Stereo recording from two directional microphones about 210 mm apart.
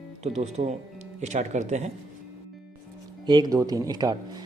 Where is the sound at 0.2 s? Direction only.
30° right (ahead or behind).